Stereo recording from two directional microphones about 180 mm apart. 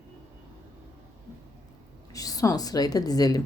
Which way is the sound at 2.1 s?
20° left (ahead or behind).